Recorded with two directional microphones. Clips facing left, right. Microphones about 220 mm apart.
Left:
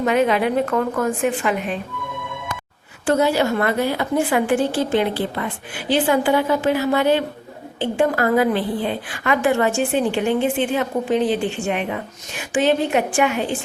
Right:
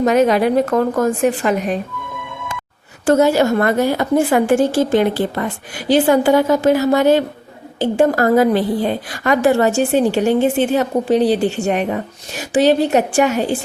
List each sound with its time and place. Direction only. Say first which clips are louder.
0.0 s a woman's voice: right 4 dB; 40° right (ahead or behind)
3.1 s a woman's voice: right 5 dB; 45° right (ahead or behind)